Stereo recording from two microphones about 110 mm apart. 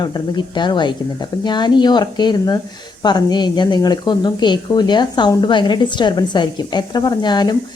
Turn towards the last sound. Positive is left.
turn(degrees=40)  # may be behind; listen again after turning